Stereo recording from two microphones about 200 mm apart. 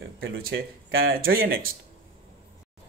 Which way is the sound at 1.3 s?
45° right (ahead or behind).